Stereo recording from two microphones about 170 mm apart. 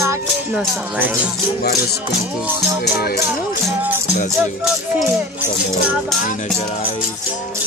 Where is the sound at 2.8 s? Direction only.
65° left (ahead or behind).